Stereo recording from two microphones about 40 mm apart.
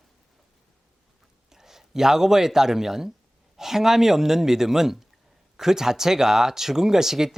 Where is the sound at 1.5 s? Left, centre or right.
Centre.